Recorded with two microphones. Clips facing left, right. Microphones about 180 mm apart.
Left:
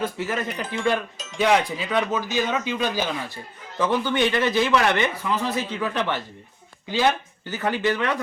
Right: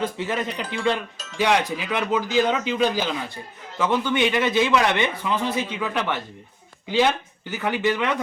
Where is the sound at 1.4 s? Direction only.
90° right.